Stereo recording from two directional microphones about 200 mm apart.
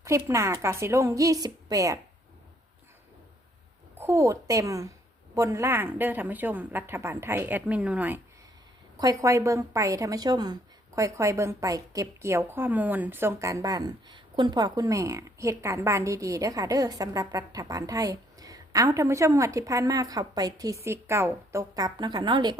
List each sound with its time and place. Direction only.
0.0 s a woman's voice: 15° right (ahead or behind)
3.9 s a woman's voice: 10° right (ahead or behind)